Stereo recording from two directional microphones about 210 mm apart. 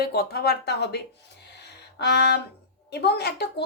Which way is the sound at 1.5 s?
55° left (ahead or behind).